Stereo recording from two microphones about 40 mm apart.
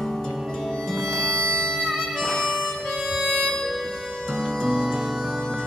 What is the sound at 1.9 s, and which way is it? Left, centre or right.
Harmonica, centre.